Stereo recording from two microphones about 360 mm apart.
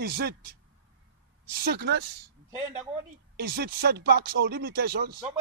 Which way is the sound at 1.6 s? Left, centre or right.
Right.